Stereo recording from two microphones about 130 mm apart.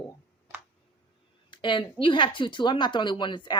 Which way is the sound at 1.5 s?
40° left (ahead or behind).